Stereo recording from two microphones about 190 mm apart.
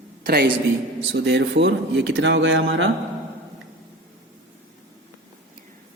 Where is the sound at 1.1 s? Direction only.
65° right (ahead or behind); by 2.9 s 85° right.